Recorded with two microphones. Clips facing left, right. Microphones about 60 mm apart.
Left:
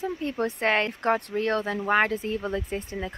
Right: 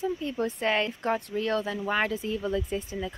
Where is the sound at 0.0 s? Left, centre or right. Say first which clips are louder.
Left 1 dB; left.